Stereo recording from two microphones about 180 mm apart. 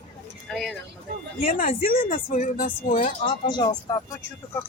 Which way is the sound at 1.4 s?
50° left (ahead or behind).